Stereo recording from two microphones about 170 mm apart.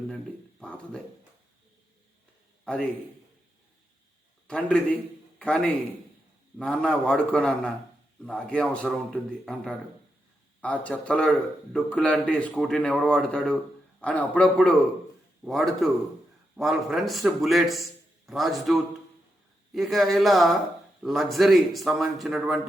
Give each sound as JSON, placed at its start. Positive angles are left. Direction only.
{"t": 0.6, "sound": "a sound", "side_deg": 5}
{"t": 2.7, "sound": "a man's voice", "side_deg": 5}
{"t": 4.4, "sound": "a man's voice", "side_deg": 5}